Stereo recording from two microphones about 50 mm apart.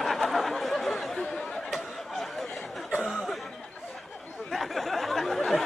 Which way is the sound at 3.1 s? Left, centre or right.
Centre.